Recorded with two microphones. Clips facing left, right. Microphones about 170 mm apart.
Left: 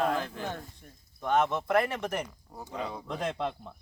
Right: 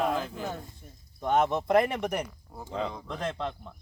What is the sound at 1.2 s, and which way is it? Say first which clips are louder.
Speech: right 2 dB; 15° right (ahead or behind).